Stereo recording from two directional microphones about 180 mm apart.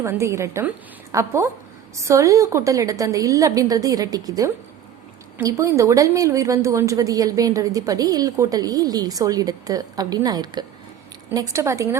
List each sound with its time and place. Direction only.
0.0 s a woman's voice: 15° right (ahead or behind)